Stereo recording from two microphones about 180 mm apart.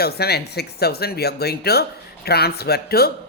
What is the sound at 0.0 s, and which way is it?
Speech, 60° left (ahead or behind).